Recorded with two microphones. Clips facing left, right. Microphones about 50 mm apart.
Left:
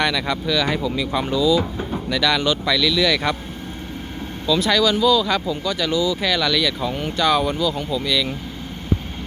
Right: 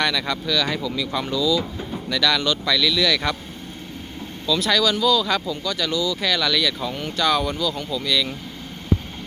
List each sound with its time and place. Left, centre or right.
0.0 s speech: centre
4.4 s speech: centre